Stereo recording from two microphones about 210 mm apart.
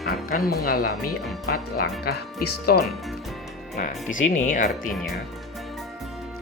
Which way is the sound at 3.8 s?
40° left (ahead or behind).